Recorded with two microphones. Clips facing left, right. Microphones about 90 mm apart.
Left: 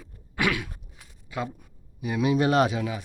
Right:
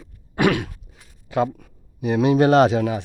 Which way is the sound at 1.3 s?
80° right.